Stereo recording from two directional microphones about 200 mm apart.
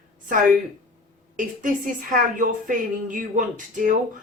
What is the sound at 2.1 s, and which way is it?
Speech, 40° right (ahead or behind).